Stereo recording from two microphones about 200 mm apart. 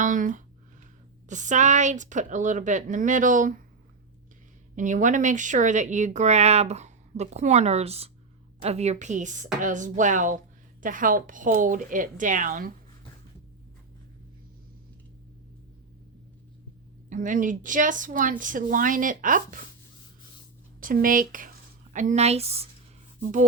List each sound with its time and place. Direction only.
0.0 s speech: 40° right (ahead or behind)
4.7 s speech: 40° right (ahead or behind)
17.1 s speech: 40° right (ahead or behind)
20.8 s speech: 45° right (ahead or behind)